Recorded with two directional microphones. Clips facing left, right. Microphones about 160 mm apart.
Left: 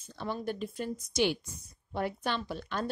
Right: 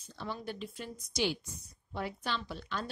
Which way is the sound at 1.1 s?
55° left (ahead or behind).